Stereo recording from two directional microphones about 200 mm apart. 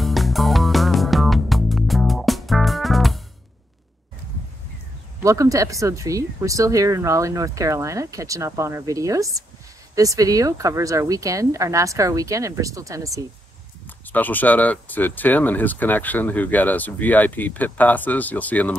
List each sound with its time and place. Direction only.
0.0 s music: centre (ahead or behind)
5.2 s speech: 15° right (ahead or behind)
13.8 s speech: 10° left (ahead or behind)